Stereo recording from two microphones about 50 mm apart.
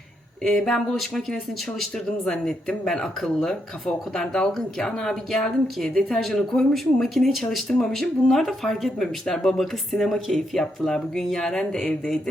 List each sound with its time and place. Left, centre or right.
0.4 s speech: centre
2.3 s speech: centre
5.9 s speech: centre
6.1 s speech: centre
7.7 s speech: centre